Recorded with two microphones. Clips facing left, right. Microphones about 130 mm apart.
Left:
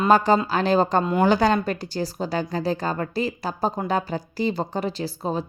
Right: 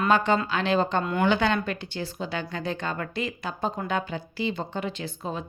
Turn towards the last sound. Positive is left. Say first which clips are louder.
# left 6 dB
turn(degrees=35)  # may be behind; listen again after turning